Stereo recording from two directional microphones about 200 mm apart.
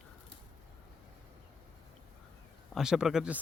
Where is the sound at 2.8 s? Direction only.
5° right (ahead or behind).